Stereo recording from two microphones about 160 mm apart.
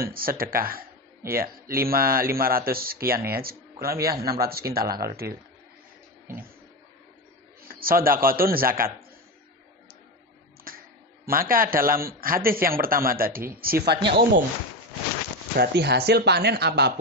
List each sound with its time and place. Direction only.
0.0 s speech: 65° right (ahead or behind)
7.6 s a man's voice: 65° right (ahead or behind)
10.7 s a sound: 65° right (ahead or behind)
11.2 s a man's voice: 65° right (ahead or behind); by 14.4 s 90° right
15.5 s speech: 90° right